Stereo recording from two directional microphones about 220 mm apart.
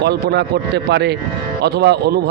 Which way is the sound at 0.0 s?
50° right (ahead or behind).